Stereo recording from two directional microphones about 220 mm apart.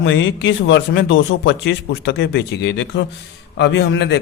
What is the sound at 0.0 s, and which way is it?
Speech, 60° left (ahead or behind).